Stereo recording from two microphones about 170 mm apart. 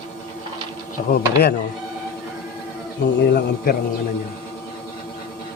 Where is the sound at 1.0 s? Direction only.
45° left (ahead or behind).